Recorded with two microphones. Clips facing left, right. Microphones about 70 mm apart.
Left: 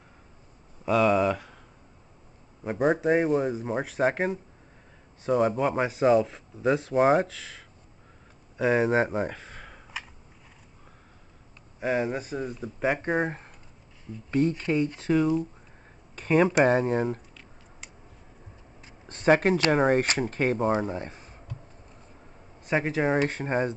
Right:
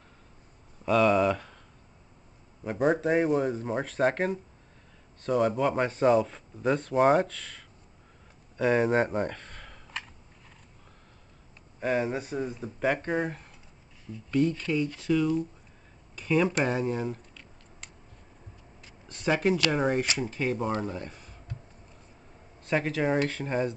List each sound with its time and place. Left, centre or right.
0.8 s speech: centre
2.6 s a man's voice: centre
11.8 s speech: centre
12.8 s a man's voice: centre
13.1 s speech: left
14.1 s speech: centre
14.7 s speech: left
16.2 s a sound: left
16.6 s speech: left
17.3 s a sound: centre
19.0 s speech: left
20.7 s speech: left
22.6 s speech: centre